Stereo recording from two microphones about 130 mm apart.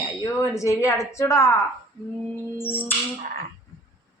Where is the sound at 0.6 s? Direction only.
25° left (ahead or behind).